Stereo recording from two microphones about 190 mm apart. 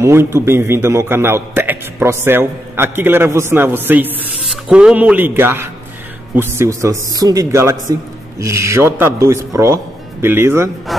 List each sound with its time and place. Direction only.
0.0 s a man's voice: 15° right (ahead or behind)
10.9 s a man's voice: centre (ahead or behind)